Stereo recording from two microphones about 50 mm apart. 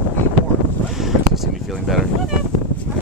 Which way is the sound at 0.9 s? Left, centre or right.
Centre.